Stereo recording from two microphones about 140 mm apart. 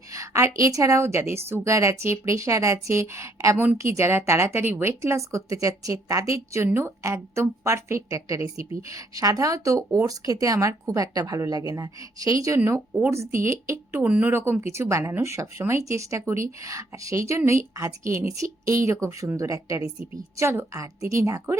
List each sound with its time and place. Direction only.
0.1 s a woman's voice: 20° right (ahead or behind)